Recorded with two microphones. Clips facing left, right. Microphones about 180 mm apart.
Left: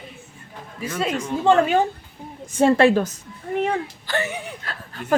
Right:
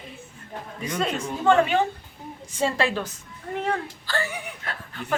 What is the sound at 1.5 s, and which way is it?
Speech, 40° left (ahead or behind).